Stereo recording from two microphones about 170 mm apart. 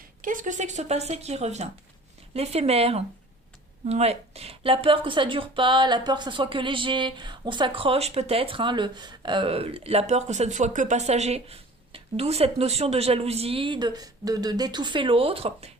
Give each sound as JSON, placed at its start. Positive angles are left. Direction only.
{"t": 0.2, "sound": "speech", "side_deg": -50}